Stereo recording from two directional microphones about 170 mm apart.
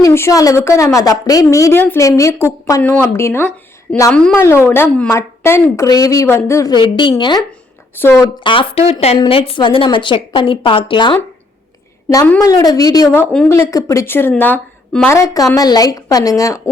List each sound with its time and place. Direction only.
0.0 s a woman's voice: 15° left (ahead or behind)
7.9 s a woman's voice: 10° left (ahead or behind)
8.4 s a woman's voice: 30° left (ahead or behind)
12.4 s a woman's voice: 20° left (ahead or behind)